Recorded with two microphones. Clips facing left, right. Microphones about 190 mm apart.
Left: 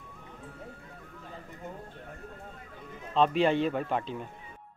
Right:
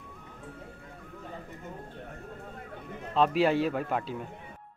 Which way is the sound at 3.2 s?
5° right (ahead or behind).